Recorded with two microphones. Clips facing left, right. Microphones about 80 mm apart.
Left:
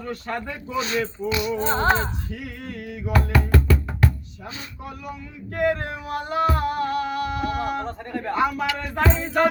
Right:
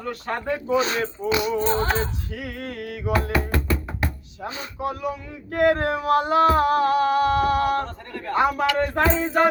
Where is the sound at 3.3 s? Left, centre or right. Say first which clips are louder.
Left 2 dB; right.